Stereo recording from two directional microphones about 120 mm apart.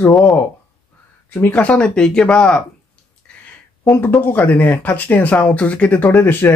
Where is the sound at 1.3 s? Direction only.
15° left (ahead or behind).